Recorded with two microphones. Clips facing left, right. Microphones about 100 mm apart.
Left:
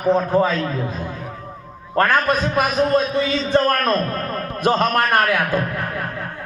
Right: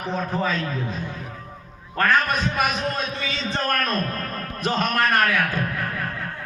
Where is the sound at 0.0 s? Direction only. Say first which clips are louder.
Left 9 dB; 40° left (ahead or behind).